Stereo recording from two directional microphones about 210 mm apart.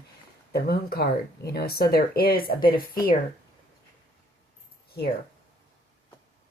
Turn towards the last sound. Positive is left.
turn(degrees=45)  # may be behind; listen again after turning